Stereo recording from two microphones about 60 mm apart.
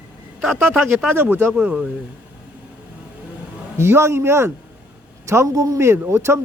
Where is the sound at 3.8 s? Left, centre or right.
Right.